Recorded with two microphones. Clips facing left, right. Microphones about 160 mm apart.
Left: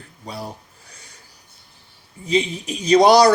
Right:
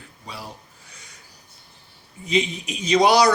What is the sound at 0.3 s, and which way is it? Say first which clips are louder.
Speech: left 6 dB; 40° left (ahead or behind).